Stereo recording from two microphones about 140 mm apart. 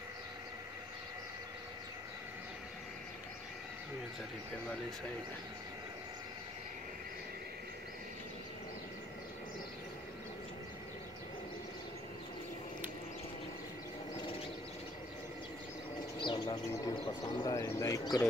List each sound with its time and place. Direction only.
16.2 s bird: 35° left (ahead or behind)